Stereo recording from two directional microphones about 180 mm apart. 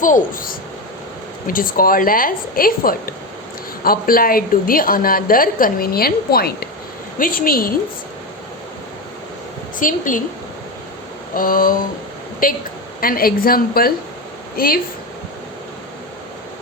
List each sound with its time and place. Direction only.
0.0 s a woman's voice: 50° left (ahead or behind)
9.7 s a woman's voice: 45° left (ahead or behind)
11.3 s a woman's voice: 50° left (ahead or behind)